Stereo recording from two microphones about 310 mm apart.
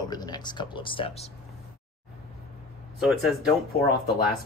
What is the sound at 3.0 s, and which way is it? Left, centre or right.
Speech, centre.